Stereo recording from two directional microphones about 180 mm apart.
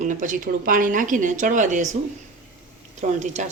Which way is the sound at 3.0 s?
45° right (ahead or behind).